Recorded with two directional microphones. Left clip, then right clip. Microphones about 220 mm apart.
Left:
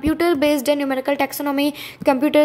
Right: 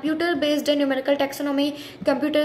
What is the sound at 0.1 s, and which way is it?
A woman's voice, 40° left (ahead or behind).